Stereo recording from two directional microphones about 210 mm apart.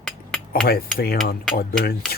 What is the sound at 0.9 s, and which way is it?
Cutlery, 45° left (ahead or behind).